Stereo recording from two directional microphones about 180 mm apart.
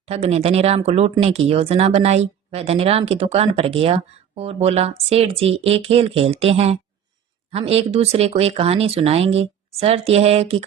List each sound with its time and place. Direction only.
0.0 s speech: 35° right (ahead or behind)